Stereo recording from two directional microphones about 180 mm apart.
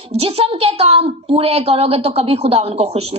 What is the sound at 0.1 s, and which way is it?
A woman's voice, 35° right (ahead or behind).